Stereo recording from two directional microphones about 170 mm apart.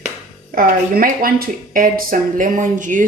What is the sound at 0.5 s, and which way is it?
A woman's voice, 60° right (ahead or behind).